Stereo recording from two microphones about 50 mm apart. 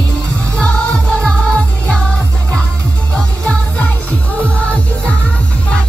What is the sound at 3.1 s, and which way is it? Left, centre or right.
Music, left.